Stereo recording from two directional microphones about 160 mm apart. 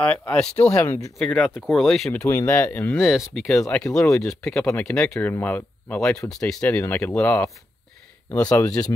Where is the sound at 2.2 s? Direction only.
20° left (ahead or behind).